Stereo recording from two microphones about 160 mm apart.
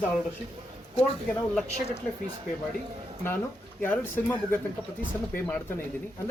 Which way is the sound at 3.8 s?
15° left (ahead or behind).